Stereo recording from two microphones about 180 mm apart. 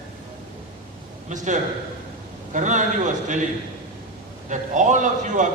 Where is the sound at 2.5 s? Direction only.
45° right (ahead or behind).